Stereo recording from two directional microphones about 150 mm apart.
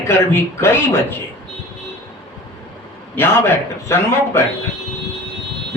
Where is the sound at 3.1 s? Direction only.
15° left (ahead or behind).